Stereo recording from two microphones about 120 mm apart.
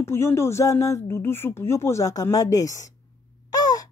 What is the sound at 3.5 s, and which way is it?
Gasp, 30° left (ahead or behind).